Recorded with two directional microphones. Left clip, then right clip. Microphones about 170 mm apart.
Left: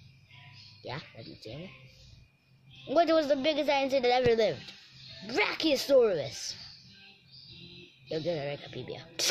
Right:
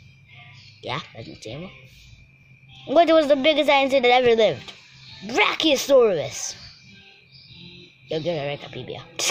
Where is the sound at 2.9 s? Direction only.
15° right (ahead or behind).